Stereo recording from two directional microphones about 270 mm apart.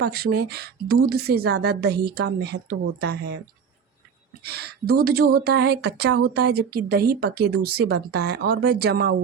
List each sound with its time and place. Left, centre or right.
0.0 s speech: right
4.4 s speech: right